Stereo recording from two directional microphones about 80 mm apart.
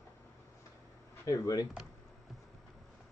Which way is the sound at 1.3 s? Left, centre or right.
Left.